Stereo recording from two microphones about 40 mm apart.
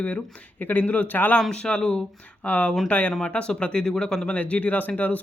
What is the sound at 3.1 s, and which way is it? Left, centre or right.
Speech, centre.